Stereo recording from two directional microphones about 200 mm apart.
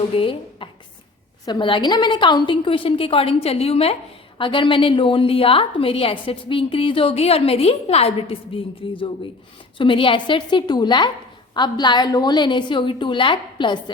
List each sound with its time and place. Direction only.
0.1 s a woman's voice: 25° left (ahead or behind)